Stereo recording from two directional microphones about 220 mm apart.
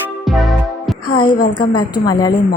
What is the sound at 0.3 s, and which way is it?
Music, centre (ahead or behind).